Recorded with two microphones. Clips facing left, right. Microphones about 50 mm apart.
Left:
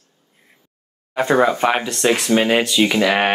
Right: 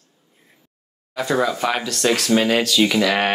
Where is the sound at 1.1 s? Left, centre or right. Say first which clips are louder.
Left 5 dB; left.